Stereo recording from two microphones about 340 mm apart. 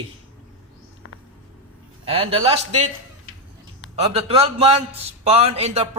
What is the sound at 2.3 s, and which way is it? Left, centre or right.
Speech, centre.